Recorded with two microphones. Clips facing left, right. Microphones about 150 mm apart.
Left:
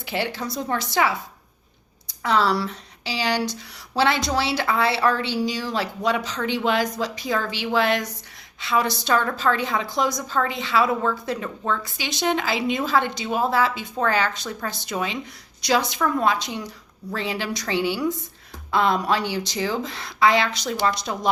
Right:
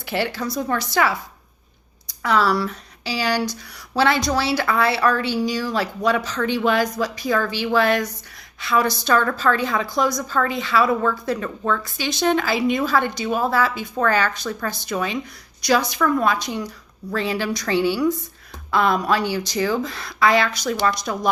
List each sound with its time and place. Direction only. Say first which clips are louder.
0.1 s a woman's voice: right 3 dB; 20° left (ahead or behind)
2.2 s a woman's voice: right 2 dB; 25° left (ahead or behind)